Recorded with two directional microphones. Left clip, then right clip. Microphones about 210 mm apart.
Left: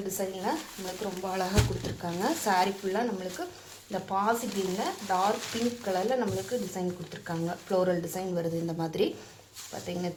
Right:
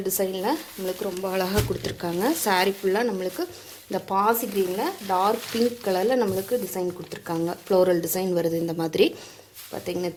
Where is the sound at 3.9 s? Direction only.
55° right (ahead or behind).